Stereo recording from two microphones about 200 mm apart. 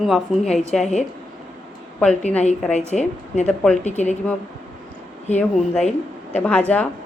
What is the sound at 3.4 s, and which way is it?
Speech, 5° left (ahead or behind).